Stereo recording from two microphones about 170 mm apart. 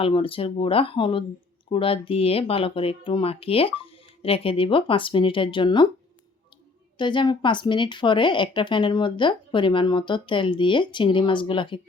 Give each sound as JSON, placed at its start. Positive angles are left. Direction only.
{"t": 0.0, "sound": "speech", "side_deg": 30}
{"t": 7.0, "sound": "a woman's voice", "side_deg": 25}